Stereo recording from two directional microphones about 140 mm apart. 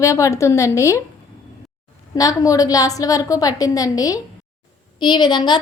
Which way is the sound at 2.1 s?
25° left (ahead or behind).